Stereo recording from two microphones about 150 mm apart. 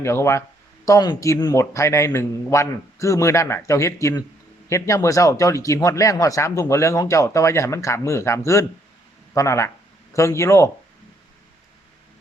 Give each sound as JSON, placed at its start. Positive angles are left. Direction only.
{"t": 0.0, "sound": "speech", "side_deg": 15}